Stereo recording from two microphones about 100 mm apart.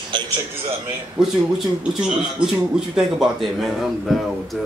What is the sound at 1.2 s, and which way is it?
A man's voice, 10° right (ahead or behind).